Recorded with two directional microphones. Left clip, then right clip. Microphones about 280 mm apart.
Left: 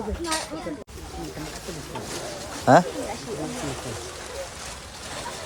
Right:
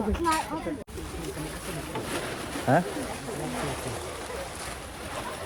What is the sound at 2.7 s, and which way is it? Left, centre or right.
Speech, centre.